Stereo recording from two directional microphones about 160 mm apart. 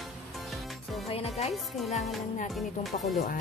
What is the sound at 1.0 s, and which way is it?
Music, 40° left (ahead or behind).